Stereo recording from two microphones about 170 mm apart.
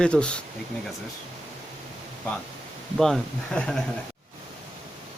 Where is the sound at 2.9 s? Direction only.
Centre (ahead or behind).